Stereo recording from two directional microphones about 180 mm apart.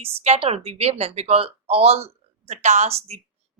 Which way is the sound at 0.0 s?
35° right (ahead or behind).